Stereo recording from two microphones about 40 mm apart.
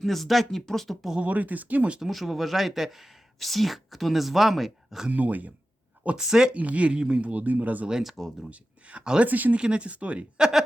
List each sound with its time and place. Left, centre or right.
0.0 s speech: centre
1.2 s speech: right
2.0 s speech: centre
5.1 s speech: right
6.1 s speech: centre
6.5 s speech: right
8.0 s speech: centre
8.4 s speech: right
9.2 s speech: right
9.6 s speech: right